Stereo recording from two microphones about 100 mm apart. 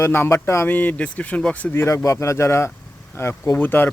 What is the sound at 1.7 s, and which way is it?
Speech, 30° left (ahead or behind).